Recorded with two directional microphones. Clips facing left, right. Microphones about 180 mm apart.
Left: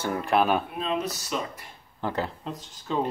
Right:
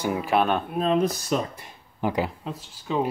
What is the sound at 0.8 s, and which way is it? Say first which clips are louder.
Speech: right 7 dB; 45° right (ahead or behind).